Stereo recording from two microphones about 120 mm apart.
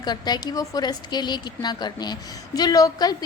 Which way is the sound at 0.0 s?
35° left (ahead or behind).